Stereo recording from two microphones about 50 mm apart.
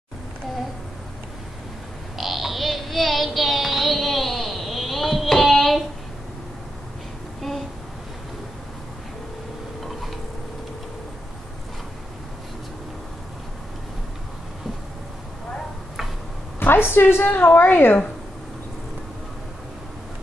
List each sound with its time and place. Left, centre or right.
2.1 s child singing: centre
16.5 s a sound: left
16.9 s a woman's voice: left